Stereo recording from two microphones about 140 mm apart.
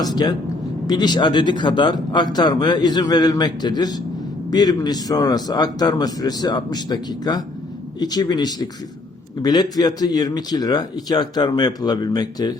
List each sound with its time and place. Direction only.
0.0 s speech: 30° left (ahead or behind)